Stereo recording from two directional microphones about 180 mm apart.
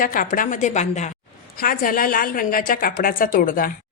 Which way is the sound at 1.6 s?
55° left (ahead or behind).